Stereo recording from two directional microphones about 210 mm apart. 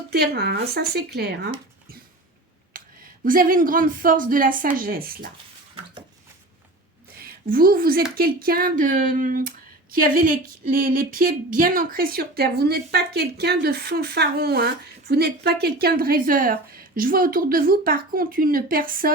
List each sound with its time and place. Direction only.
0.1 s speech: 50° right (ahead or behind)
2.7 s a sound: 40° right (ahead or behind)
3.2 s a woman's voice: 40° right (ahead or behind)
7.2 s speech: 45° right (ahead or behind)